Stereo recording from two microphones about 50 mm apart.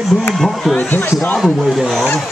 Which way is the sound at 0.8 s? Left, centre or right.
Left.